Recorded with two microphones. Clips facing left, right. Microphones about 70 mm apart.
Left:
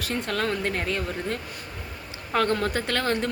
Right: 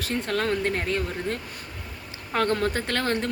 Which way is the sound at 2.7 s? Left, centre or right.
Right.